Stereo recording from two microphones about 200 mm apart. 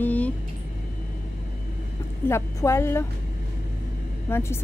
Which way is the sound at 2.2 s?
15° left (ahead or behind).